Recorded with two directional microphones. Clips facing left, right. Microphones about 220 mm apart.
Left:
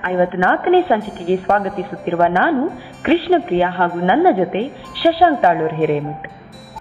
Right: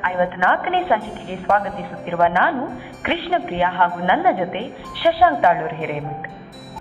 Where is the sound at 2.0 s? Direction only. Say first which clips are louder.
Left 3 dB; 35° left (ahead or behind).